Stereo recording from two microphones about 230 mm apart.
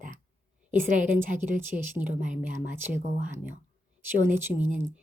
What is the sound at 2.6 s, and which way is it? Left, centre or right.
Speech, centre.